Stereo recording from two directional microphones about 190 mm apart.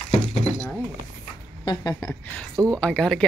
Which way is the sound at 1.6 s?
20° left (ahead or behind).